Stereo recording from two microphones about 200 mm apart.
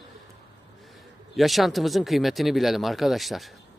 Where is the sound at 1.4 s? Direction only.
Centre (ahead or behind).